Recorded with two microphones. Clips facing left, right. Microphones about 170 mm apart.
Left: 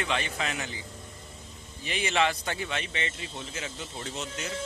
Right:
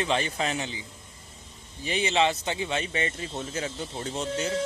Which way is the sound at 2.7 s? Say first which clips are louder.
Right 5 dB; 35° right (ahead or behind).